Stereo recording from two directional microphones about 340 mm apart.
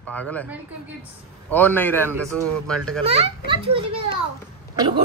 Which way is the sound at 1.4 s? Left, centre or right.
Centre.